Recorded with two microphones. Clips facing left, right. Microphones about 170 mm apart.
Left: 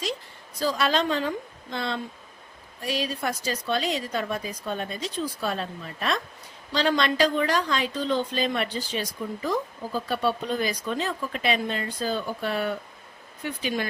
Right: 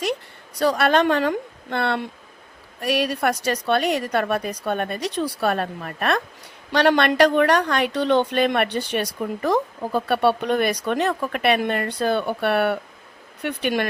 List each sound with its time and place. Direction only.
0.0 s a woman's voice: 65° right (ahead or behind)